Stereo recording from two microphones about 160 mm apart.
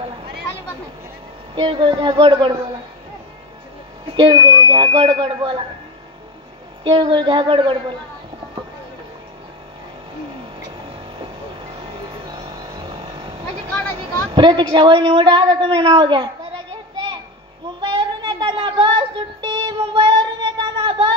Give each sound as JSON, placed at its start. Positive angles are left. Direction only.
{"t": 1.5, "sound": "speech", "side_deg": -30}
{"t": 4.2, "sound": "speech", "side_deg": -30}
{"t": 6.8, "sound": "speech", "side_deg": -30}
{"t": 11.1, "sound": "music", "side_deg": -30}
{"t": 13.9, "sound": "a woman's voice", "side_deg": -30}
{"t": 17.7, "sound": "a sound", "side_deg": -30}